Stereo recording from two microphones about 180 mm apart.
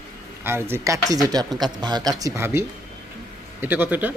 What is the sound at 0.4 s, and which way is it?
Speech, 15° right (ahead or behind).